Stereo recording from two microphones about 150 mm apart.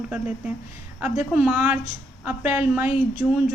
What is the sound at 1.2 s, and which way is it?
A woman's voice, 10° right (ahead or behind).